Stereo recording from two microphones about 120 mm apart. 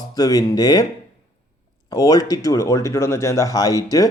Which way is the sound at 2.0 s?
30° left (ahead or behind).